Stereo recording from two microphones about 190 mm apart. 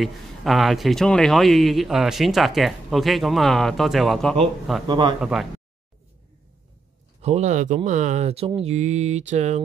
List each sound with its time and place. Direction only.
0.0 s speech: centre (ahead or behind)
4.8 s a man's voice: 25° right (ahead or behind)
5.2 s speech: centre (ahead or behind)
7.2 s speech: 35° right (ahead or behind)